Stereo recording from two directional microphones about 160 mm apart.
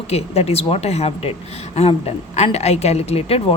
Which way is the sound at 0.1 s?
40° left (ahead or behind).